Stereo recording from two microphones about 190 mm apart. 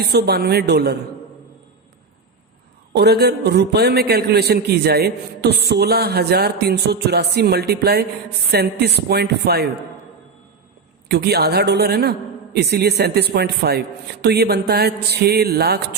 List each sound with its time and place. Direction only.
0.0 s a man's voice: 55° right (ahead or behind)
2.9 s a man's voice: 60° right (ahead or behind)
11.1 s a man's voice: 60° right (ahead or behind)